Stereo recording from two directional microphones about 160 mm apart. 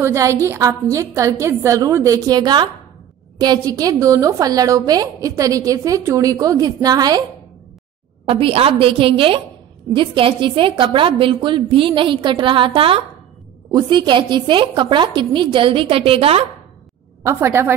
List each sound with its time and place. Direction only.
0.0 s a woman's voice: 20° right (ahead or behind)
8.3 s a woman's voice: 35° right (ahead or behind)
17.2 s a woman's voice: 15° right (ahead or behind)